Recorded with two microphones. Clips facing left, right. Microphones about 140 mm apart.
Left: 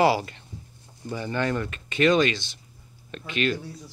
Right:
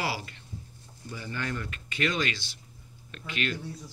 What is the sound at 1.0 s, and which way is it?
Speech, 80° left.